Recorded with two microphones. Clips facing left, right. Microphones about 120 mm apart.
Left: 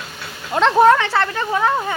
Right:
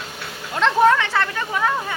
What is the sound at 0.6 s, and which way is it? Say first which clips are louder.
Speech: left 3 dB; 40° left (ahead or behind).